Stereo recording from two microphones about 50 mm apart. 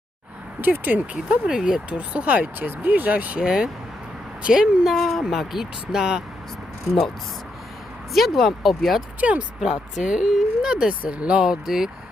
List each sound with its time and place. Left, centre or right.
0.6 s speech: right
1.1 s speech: centre
1.9 s speech: right
3.3 s speech: centre
4.9 s speech: centre
8.1 s speech: centre
9.2 s speech: right
9.6 s speech: centre